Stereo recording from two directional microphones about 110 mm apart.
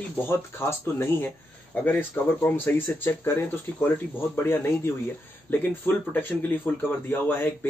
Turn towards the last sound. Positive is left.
turn(degrees=20)  # may be behind; listen again after turning